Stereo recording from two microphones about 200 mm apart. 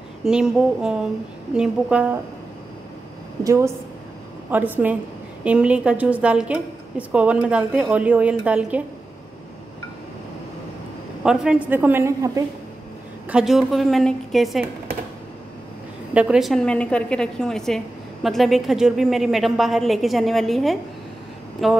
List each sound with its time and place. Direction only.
0.2 s a woman's voice: 5° right (ahead or behind)
3.4 s a woman's voice: 15° right (ahead or behind)
11.2 s a woman's voice: 5° right (ahead or behind)
13.3 s a woman's voice: 5° right (ahead or behind)
16.1 s a woman's voice: 5° right (ahead or behind)